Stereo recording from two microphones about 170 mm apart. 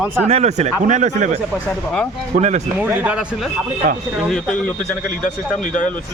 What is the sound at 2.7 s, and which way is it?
A man's voice, 10° right (ahead or behind).